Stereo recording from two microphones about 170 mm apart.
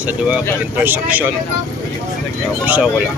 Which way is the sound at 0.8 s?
10° right (ahead or behind).